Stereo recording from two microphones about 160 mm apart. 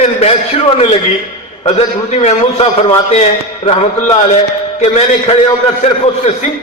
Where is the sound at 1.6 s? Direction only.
40° left (ahead or behind).